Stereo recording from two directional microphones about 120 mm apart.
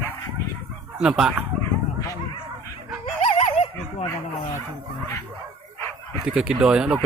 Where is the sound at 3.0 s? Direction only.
50° left (ahead or behind).